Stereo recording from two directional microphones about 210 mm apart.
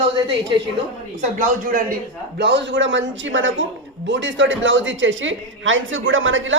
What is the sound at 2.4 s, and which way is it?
A woman's voice, 55° right (ahead or behind).